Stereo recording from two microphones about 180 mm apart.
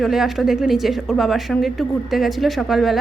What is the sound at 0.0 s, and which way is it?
A woman's voice, centre (ahead or behind).